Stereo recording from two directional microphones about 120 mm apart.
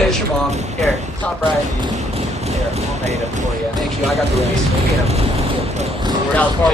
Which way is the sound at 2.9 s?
65° right (ahead or behind).